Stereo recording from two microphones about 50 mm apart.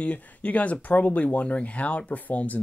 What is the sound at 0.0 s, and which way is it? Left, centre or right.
Speech, left.